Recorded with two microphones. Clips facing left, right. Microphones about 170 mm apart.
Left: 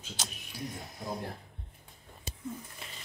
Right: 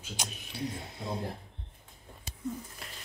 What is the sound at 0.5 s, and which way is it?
Speech, 25° right (ahead or behind).